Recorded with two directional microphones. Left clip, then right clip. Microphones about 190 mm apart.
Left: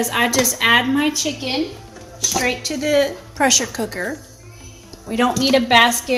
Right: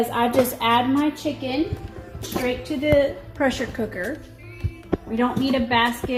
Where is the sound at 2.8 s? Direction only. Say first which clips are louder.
Left 1 dB; 30° left (ahead or behind).